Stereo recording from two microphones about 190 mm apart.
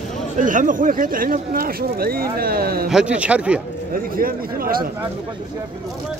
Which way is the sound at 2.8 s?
5° right (ahead or behind).